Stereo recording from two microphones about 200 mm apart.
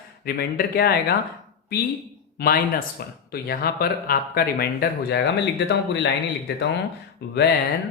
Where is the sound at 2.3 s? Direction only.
50° left (ahead or behind).